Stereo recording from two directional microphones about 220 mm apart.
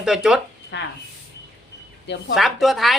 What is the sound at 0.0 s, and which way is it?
Speech, centre (ahead or behind).